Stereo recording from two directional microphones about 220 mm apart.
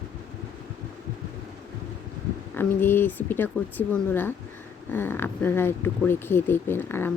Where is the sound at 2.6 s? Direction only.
10° left (ahead or behind).